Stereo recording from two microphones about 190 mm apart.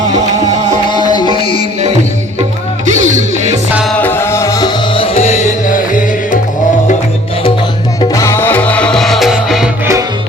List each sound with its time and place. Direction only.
0.9 s music: 25° left (ahead or behind)
2.8 s music: 40° right (ahead or behind)
4.0 s music: 10° left (ahead or behind); by 6.4 s 45° left (ahead or behind)
8.1 s music: 15° left (ahead or behind); by 9.6 s centre (ahead or behind)